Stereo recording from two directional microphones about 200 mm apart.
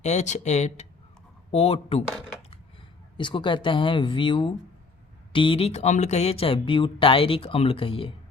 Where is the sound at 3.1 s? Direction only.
25° left (ahead or behind).